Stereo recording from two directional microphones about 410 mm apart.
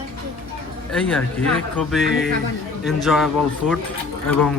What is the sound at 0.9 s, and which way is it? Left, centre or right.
Speech, centre.